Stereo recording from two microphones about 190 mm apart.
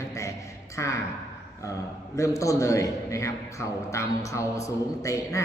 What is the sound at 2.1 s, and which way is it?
Speech, 15° left (ahead or behind).